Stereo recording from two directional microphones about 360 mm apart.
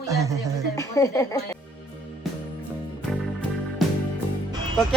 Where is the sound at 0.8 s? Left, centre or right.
Centre.